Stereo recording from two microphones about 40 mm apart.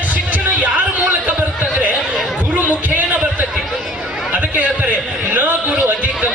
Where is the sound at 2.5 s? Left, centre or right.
Right.